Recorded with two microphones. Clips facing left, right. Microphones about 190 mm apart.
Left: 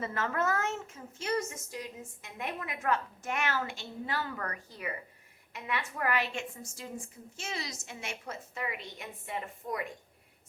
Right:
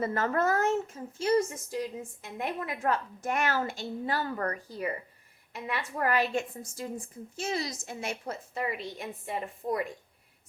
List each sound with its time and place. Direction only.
0.0 s a woman's voice: 40° right (ahead or behind)